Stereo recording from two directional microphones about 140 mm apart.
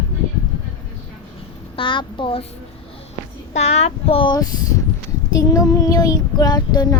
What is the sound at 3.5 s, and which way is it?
Child singing, 50° left (ahead or behind).